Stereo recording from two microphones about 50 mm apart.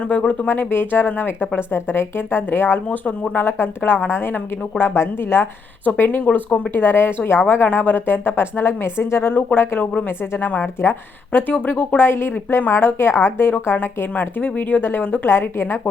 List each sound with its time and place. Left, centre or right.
0.1 s speech: left
0.4 s a woman's voice: left
3.4 s a woman's voice: left
5.8 s speech: left
6.7 s a woman's voice: left
9.3 s a woman's voice: left
11.9 s a woman's voice: left
14.1 s speech: left
14.8 s a woman's voice: left